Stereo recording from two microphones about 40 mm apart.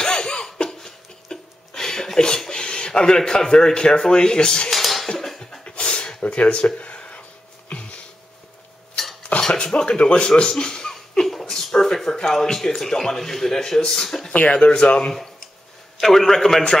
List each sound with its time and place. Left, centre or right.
0.0 s laughter: centre
4.6 s dishes: centre
5.6 s a sound: left
6.2 s a sound: left
9.3 s dishes: left
9.7 s a man's voice: left
14.5 s speech: left
16.0 s a man's voice: centre